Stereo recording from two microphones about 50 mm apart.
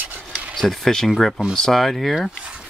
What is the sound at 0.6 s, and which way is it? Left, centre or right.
Speech, centre.